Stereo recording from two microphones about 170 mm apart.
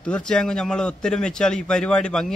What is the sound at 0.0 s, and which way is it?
A man's voice, 5° left (ahead or behind).